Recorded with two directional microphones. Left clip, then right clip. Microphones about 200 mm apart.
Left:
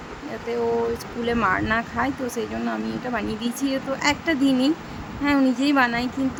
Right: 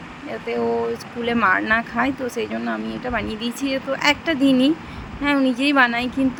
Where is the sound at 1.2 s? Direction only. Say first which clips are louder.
Right 4 dB; 5° right (ahead or behind).